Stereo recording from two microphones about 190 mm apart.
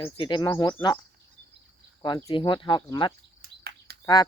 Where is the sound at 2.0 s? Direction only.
20° left (ahead or behind).